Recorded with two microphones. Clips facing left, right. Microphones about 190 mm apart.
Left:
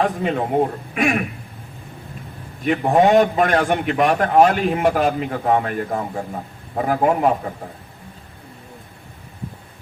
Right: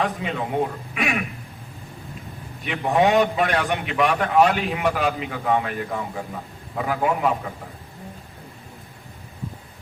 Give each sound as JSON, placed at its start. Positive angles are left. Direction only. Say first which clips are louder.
{"t": 0.0, "sound": "a man's voice", "louder": "left 5 dB", "side_deg": 45}
{"t": 2.6, "sound": "a man's voice", "louder": "left 4 dB", "side_deg": 45}